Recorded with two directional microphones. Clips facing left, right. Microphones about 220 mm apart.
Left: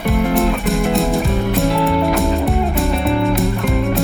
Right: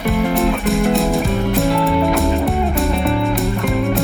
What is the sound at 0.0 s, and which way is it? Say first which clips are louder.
Music: even; centre (ahead or behind).